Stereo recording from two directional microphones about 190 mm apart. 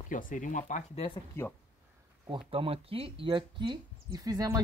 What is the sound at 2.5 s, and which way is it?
Speech, 30° right (ahead or behind).